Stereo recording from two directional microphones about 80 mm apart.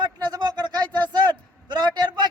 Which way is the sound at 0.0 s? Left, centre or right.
Right.